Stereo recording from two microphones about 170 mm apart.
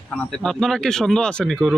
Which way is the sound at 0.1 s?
5° left (ahead or behind).